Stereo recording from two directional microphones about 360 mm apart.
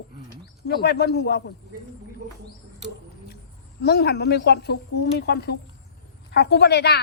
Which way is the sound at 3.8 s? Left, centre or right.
Left.